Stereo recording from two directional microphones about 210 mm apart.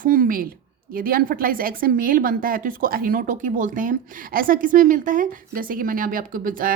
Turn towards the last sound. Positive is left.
turn(degrees=-40)  # may be behind; listen again after turning